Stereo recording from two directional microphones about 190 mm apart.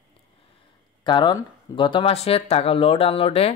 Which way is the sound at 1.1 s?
25° left (ahead or behind).